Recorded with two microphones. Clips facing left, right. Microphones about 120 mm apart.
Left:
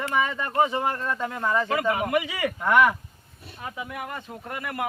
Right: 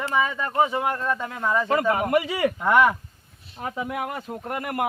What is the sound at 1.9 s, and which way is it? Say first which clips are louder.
Speech: right 3 dB; 45° right (ahead or behind).